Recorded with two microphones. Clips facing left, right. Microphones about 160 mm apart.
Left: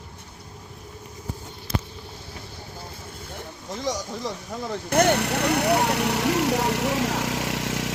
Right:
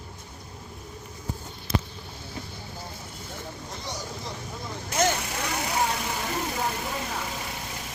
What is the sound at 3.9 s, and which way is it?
Speech, 90° left.